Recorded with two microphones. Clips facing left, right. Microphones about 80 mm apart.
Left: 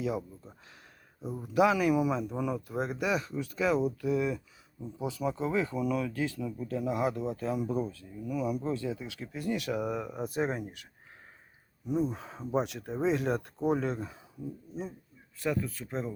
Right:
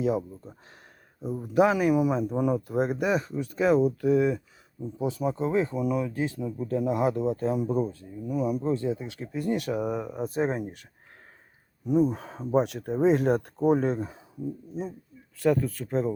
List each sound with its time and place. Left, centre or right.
1.2 s speech: centre
1.5 s speech: right
6.6 s speech: right
11.9 s speech: right
15.4 s speech: right